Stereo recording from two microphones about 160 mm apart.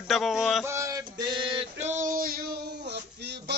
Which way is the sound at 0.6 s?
20° right (ahead or behind).